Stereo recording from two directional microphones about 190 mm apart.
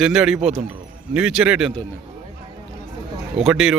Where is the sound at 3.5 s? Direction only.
Centre (ahead or behind).